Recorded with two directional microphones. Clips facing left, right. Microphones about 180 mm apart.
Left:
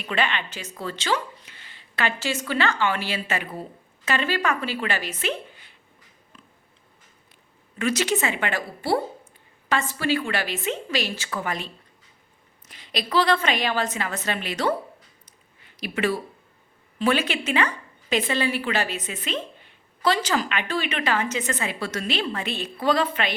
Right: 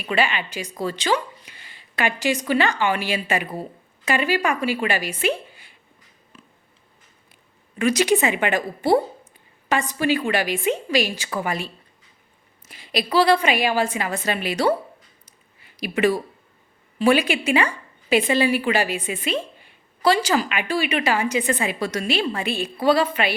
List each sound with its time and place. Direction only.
0.0 s speech: 10° right (ahead or behind)
7.8 s a woman's voice: 15° right (ahead or behind)